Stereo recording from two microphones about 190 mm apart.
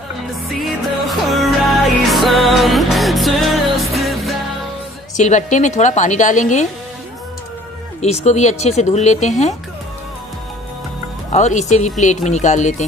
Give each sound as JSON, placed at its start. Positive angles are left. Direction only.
{"t": 0.6, "sound": "music", "side_deg": 0}
{"t": 5.1, "sound": "a woman's voice", "side_deg": 40}
{"t": 8.0, "sound": "a woman's voice", "side_deg": 35}
{"t": 11.3, "sound": "a woman's voice", "side_deg": 40}